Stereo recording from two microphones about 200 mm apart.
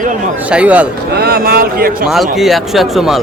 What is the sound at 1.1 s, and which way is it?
Speech, 50° right (ahead or behind).